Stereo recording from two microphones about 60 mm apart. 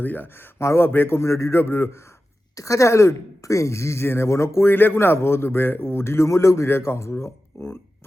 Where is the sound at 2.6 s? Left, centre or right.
Left.